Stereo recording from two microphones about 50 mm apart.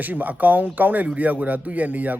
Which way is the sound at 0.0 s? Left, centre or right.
Right.